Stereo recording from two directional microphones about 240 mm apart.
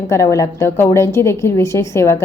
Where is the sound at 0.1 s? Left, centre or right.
Centre.